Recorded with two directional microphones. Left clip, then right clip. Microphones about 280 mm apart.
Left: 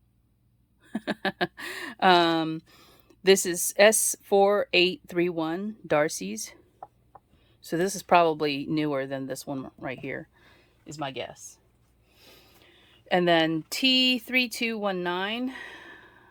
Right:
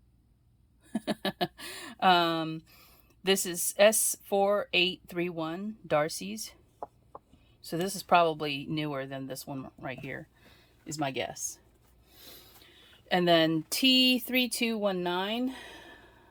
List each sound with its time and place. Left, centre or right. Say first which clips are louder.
0.9 s speech: left 3 dB; centre
7.6 s a woman's voice: left 6 dB; centre
10.9 s speech: right 1 dB; centre
12.2 s a sound: right 1 dB; centre
12.7 s speech: left 4 dB; centre